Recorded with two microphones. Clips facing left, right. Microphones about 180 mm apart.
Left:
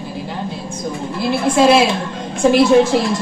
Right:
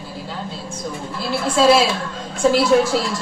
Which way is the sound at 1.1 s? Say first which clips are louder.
Left 4 dB; 20° left (ahead or behind).